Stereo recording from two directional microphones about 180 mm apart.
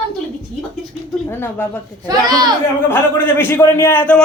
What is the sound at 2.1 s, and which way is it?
Speech, 20° right (ahead or behind).